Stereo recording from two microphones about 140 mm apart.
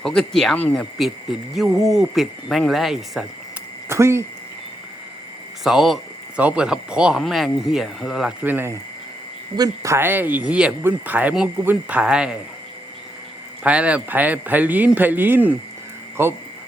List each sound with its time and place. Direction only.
0.0 s speech: 5° left (ahead or behind)
3.8 s speech: 20° right (ahead or behind)
5.6 s speech: centre (ahead or behind)
8.4 s speech: 15° right (ahead or behind)
13.7 s speech: 10° right (ahead or behind)